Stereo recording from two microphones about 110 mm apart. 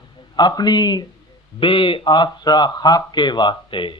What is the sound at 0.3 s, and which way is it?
Speech, 40° left (ahead or behind).